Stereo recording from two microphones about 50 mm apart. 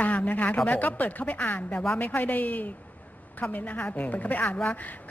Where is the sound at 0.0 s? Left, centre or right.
Left.